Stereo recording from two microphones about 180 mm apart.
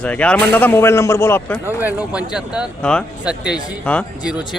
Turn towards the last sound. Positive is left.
turn(degrees=5)  # may be behind; listen again after turning